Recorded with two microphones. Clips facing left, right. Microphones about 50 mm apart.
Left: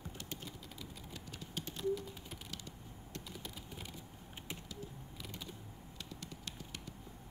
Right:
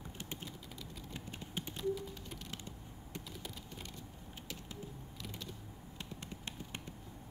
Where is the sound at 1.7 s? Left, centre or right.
Centre.